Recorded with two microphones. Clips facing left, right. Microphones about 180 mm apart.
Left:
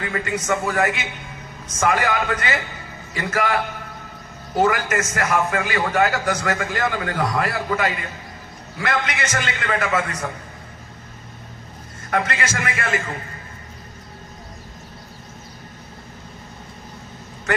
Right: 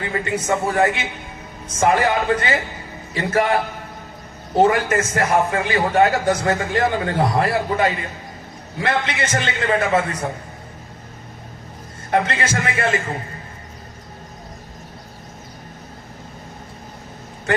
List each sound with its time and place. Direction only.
0.0 s a man's voice: 25° right (ahead or behind)
12.1 s a man's voice: 30° right (ahead or behind)